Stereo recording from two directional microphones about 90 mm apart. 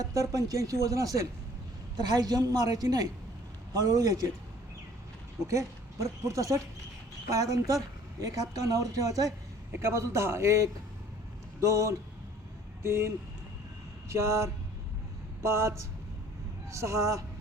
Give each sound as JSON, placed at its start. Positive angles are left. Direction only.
{"t": 0.0, "sound": "a woman's voice", "side_deg": -40}
{"t": 5.5, "sound": "speech", "side_deg": -35}